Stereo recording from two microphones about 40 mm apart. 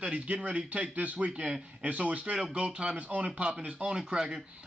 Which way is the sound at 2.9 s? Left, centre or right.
Right.